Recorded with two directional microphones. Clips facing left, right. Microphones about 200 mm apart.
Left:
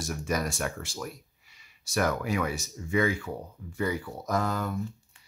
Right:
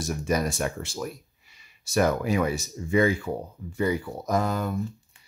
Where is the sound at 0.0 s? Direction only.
20° right (ahead or behind).